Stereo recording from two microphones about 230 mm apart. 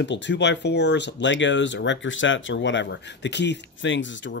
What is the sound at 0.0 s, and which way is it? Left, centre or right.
Speech, left.